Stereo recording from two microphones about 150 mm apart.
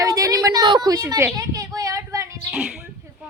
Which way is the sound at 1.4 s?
25° right (ahead or behind).